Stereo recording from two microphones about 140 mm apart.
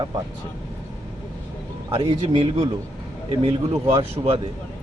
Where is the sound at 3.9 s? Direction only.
40° right (ahead or behind).